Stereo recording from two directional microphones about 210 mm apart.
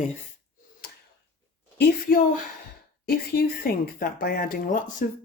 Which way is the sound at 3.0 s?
50° left (ahead or behind).